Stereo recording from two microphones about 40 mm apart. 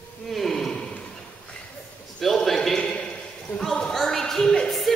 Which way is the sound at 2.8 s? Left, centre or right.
Centre.